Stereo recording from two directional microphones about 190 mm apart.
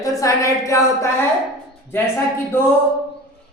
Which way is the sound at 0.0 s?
15° left (ahead or behind).